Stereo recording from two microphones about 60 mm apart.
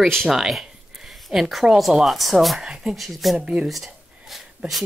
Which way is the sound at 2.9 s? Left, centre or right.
Centre.